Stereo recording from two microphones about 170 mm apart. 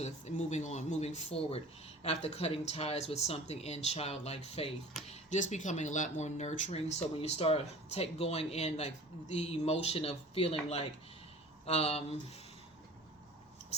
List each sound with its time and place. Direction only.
0.0 s speech: 45° left (ahead or behind)